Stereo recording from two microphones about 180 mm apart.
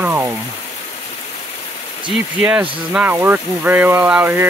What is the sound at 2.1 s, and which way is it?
Speech, 5° right (ahead or behind).